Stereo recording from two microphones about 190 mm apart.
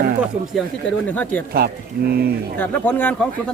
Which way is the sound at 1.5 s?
55° right (ahead or behind).